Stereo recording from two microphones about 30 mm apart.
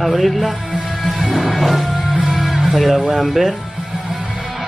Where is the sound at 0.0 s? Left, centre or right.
Centre.